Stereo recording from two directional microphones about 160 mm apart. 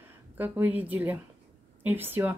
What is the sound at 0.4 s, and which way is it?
Speech, 10° right (ahead or behind).